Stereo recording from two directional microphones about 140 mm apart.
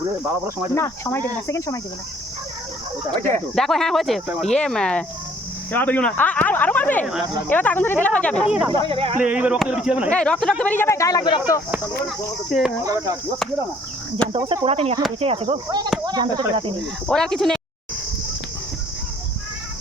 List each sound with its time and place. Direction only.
0.7 s speech: 15° left (ahead or behind)
3.2 s speech: 60° right (ahead or behind)
3.5 s speech: 5° left (ahead or behind)
8.7 s speech: 40° right (ahead or behind)
9.1 s speech: 10° right (ahead or behind)
10.1 s speech: 10° left (ahead or behind); by 11.6 s 30° left (ahead or behind)
12.5 s speech: centre (ahead or behind)
12.8 s speech: 25° right (ahead or behind)
14.3 s speech: 35° right (ahead or behind)
16.0 s speech: 30° right (ahead or behind)
16.8 s speech: 5° left (ahead or behind)